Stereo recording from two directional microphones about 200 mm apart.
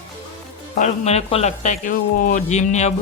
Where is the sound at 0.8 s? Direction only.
35° left (ahead or behind).